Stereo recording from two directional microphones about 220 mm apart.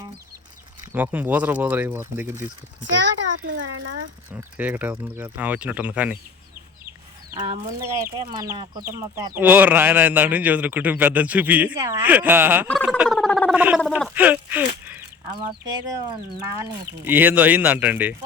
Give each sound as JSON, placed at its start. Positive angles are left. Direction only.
{"t": 0.9, "sound": "speech", "side_deg": -10}
{"t": 3.7, "sound": "speech", "side_deg": -60}
{"t": 4.3, "sound": "speech", "side_deg": -10}
{"t": 7.3, "sound": "speech", "side_deg": -15}
{"t": 12.6, "sound": "speech", "side_deg": 5}
{"t": 15.4, "sound": "speech", "side_deg": -20}
{"t": 17.0, "sound": "speech", "side_deg": -10}